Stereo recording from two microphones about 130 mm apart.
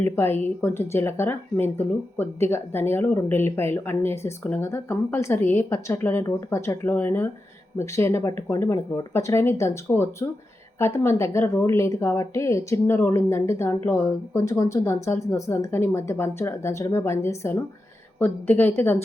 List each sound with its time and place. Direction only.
0.0 s a woman's voice: 15° left (ahead or behind)